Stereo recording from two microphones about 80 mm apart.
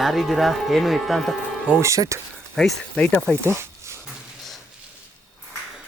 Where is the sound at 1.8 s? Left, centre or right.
Right.